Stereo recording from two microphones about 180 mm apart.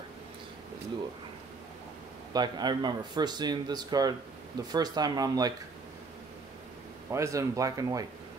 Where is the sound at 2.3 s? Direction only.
25° right (ahead or behind).